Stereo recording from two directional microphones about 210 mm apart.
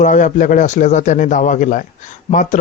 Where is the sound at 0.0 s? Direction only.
35° left (ahead or behind).